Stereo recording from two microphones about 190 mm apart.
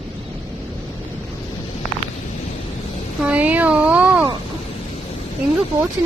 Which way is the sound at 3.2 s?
5° right (ahead or behind).